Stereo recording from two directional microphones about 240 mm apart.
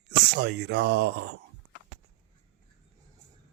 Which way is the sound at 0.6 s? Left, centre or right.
Right.